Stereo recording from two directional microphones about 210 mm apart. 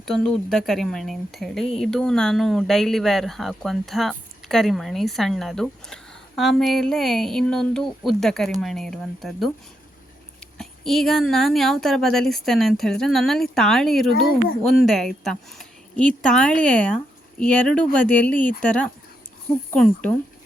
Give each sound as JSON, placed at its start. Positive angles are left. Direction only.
{"t": 0.0, "sound": "speech", "side_deg": 0}
{"t": 10.6, "sound": "speech", "side_deg": 0}